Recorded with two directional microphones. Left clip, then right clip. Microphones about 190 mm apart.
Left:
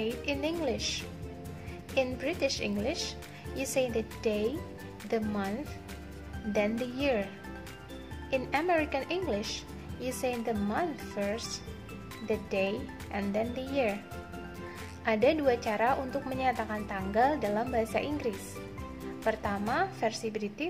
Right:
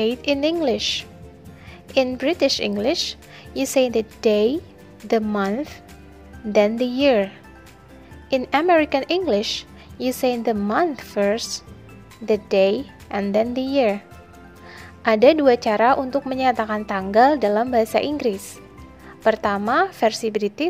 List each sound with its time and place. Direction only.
0.0 s a woman's voice: 45° right (ahead or behind)
8.3 s a woman's voice: 40° right (ahead or behind)
15.0 s a woman's voice: 45° right (ahead or behind)